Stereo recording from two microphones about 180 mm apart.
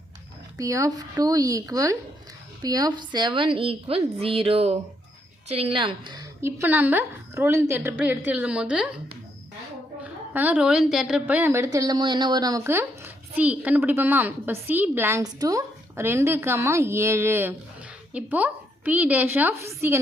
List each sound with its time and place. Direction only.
0.5 s a woman's voice: 20° right (ahead or behind)
6.4 s a woman's voice: 10° right (ahead or behind)
10.0 s a woman's voice: 10° right (ahead or behind)